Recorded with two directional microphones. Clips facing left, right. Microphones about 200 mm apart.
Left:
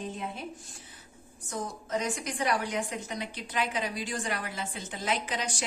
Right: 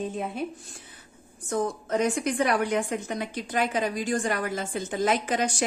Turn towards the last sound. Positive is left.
turn(degrees=-50)  # may be behind; listen again after turning